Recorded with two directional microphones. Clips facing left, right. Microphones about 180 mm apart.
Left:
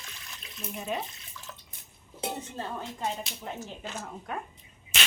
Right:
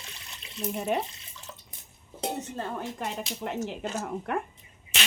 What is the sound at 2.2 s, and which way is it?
Speech, 55° right (ahead or behind).